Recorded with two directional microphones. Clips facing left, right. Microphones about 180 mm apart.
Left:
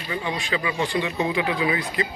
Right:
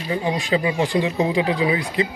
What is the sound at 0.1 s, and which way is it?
Speech, 35° right (ahead or behind).